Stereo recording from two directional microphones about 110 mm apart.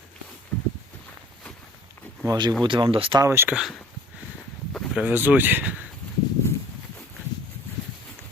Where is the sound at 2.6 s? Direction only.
50° right (ahead or behind).